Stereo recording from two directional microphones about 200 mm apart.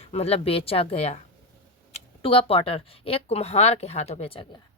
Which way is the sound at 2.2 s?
30° left (ahead or behind).